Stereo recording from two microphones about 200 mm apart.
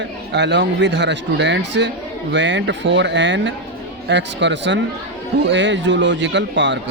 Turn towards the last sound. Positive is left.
turn(degrees=-65)  # may be behind; listen again after turning